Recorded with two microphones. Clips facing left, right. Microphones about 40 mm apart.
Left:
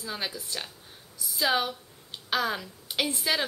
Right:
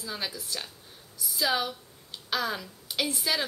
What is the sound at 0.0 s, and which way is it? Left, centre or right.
Speech, centre.